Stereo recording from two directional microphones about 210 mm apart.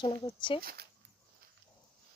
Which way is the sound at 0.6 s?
45° right (ahead or behind).